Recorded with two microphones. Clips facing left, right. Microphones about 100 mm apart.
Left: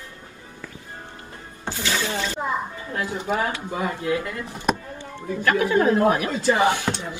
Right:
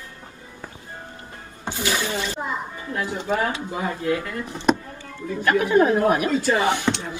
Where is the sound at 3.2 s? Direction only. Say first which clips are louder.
Right 1 dB; 15° left (ahead or behind).